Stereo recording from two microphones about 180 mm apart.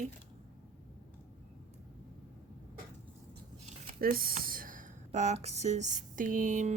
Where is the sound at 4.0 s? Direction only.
55° right (ahead or behind).